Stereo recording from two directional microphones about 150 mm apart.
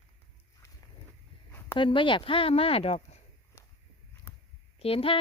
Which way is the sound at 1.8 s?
35° left (ahead or behind).